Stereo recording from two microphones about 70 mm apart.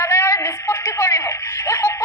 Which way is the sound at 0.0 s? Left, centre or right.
Left.